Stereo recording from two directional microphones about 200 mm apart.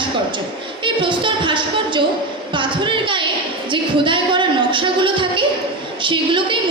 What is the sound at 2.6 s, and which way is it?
A woman's voice, 25° right (ahead or behind).